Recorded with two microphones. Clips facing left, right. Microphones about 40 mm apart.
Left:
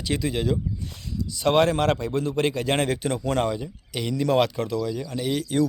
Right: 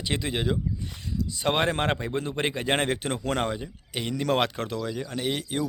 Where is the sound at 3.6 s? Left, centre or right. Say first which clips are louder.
Left 2 dB; centre.